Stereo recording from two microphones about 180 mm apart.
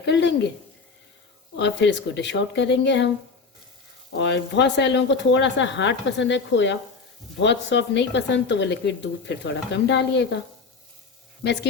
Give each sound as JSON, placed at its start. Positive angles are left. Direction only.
{"t": 0.0, "sound": "speech", "side_deg": 75}
{"t": 1.5, "sound": "speech", "side_deg": 75}
{"t": 4.2, "sound": "speech", "side_deg": 75}